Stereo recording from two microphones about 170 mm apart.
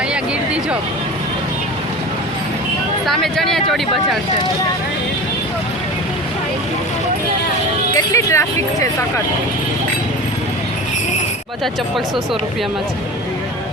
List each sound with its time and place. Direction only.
0.1 s a sound: 5° right (ahead or behind)
3.1 s speech: centre (ahead or behind)
7.9 s speech: 15° left (ahead or behind)
11.6 s speech: centre (ahead or behind)